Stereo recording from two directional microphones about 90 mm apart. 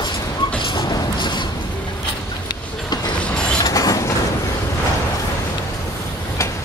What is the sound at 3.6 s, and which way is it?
Vehicle, 40° left (ahead or behind).